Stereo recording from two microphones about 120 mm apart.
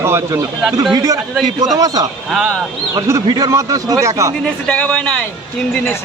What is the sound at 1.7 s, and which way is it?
Speech, 30° right (ahead or behind).